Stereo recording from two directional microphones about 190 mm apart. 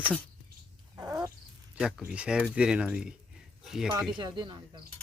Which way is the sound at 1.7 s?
5° right (ahead or behind).